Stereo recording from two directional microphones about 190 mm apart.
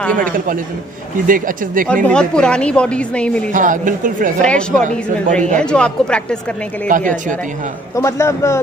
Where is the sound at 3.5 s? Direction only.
45° right (ahead or behind).